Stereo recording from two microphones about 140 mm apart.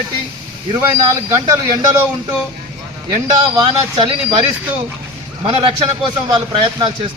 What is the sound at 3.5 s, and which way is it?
Speech, 30° right (ahead or behind).